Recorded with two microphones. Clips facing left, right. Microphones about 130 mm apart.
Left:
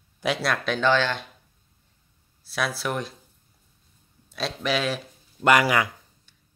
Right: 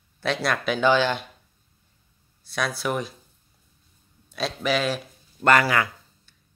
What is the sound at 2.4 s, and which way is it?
Speech, 5° left (ahead or behind).